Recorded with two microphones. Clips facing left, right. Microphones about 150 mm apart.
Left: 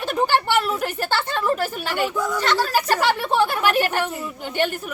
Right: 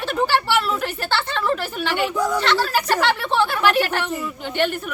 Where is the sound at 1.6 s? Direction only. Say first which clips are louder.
Even; 40° left (ahead or behind).